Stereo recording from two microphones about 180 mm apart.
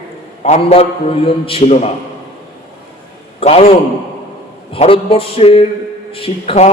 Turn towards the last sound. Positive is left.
turn(degrees=35)  # may be behind; listen again after turning